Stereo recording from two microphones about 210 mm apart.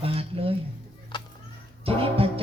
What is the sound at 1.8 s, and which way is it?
Music, 25° right (ahead or behind).